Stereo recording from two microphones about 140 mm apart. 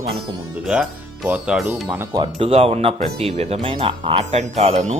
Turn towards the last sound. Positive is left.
turn(degrees=-55)  # may be behind; listen again after turning